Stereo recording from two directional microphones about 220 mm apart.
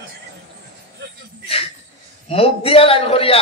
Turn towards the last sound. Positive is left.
turn(degrees=25)  # may be behind; listen again after turning